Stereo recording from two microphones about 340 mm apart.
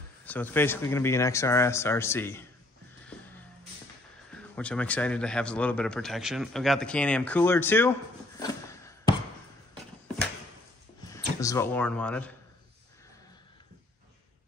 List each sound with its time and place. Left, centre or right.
0.2 s speech: centre
4.3 s speech: centre
8.4 s a sound: centre
11.1 s speech: centre